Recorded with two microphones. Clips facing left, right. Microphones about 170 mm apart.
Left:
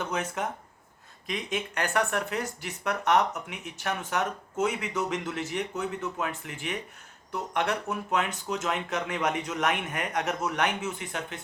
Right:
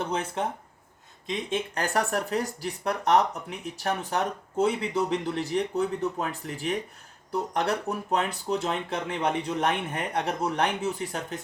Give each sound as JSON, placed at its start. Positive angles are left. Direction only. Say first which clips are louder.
{"t": 0.0, "sound": "speech", "louder": "right 2 dB", "side_deg": -30}